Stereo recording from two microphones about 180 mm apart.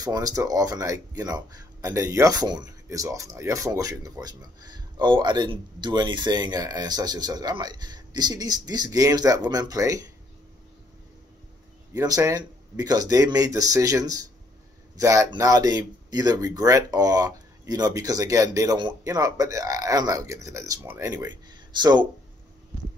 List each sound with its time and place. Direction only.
0.0 s speech: 20° right (ahead or behind)
11.9 s speech: 20° right (ahead or behind)